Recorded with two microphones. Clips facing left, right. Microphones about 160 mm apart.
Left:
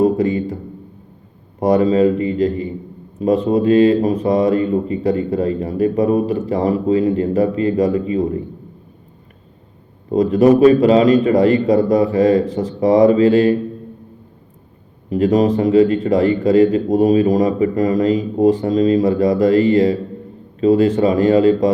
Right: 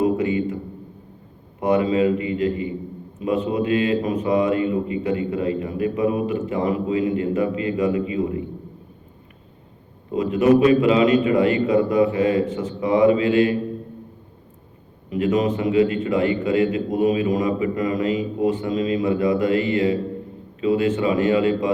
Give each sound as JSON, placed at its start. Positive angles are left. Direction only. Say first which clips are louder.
{"t": 0.0, "sound": "a sound", "louder": "left 5 dB", "side_deg": 35}
{"t": 1.5, "sound": "a man's voice", "louder": "left 5 dB", "side_deg": 40}
{"t": 10.1, "sound": "a man's voice", "louder": "left 5 dB", "side_deg": 35}
{"t": 15.1, "sound": "a man's voice", "louder": "left 6 dB", "side_deg": 40}